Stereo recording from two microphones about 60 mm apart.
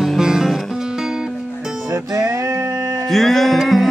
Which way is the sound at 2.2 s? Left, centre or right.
Right.